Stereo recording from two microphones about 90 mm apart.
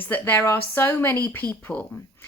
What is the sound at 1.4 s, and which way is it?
Speech, 45° right (ahead or behind).